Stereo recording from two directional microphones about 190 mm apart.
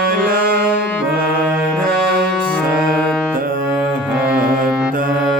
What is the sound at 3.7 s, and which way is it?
Music, 5° right (ahead or behind).